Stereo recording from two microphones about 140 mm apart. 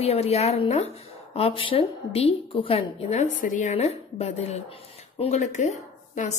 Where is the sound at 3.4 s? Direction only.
65° left (ahead or behind).